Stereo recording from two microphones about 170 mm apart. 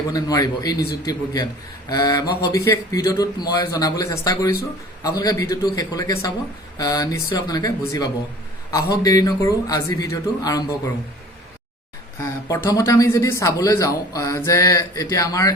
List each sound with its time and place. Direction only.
0.1 s speech: 20° left (ahead or behind)
12.2 s speech: 15° left (ahead or behind)